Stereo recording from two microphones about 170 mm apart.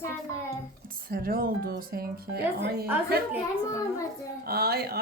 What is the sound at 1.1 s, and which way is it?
A woman's voice, 60° right (ahead or behind).